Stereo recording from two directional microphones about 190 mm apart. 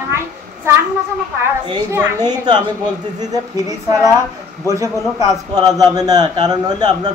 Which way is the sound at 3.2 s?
20° right (ahead or behind).